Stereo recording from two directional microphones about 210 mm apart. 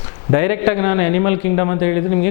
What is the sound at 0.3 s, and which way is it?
A man's voice, 10° left (ahead or behind).